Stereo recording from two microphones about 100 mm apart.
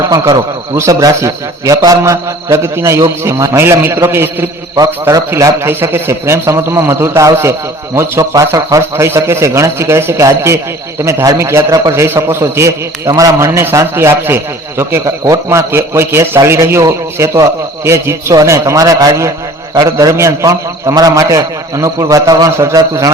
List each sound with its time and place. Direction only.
0.0 s a man's voice: 35° right (ahead or behind)